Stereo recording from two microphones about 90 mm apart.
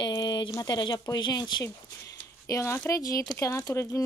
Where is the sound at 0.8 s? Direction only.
55° left (ahead or behind).